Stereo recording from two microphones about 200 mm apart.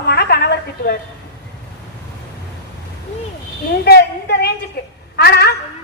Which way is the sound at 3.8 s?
55° left (ahead or behind).